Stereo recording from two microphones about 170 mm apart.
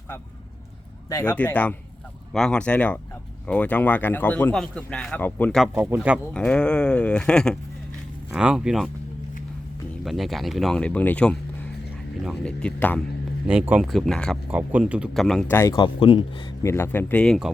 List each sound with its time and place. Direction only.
1.4 s speech: 10° left (ahead or behind)
5.7 s speech: 10° right (ahead or behind)
6.3 s speech: 5° left (ahead or behind)
10.0 s speech: centre (ahead or behind)
13.5 s speech: 5° right (ahead or behind)
14.5 s speech: 10° right (ahead or behind)
15.7 s speech: 30° left (ahead or behind)
16.6 s speech: 15° left (ahead or behind)